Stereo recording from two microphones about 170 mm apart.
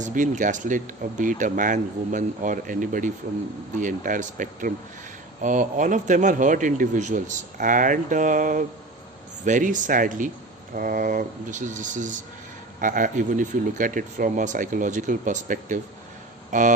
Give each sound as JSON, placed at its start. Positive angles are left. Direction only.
{"t": 0.0, "sound": "a man's voice", "side_deg": -50}